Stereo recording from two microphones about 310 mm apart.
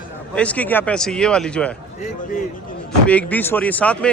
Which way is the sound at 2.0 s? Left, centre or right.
Left.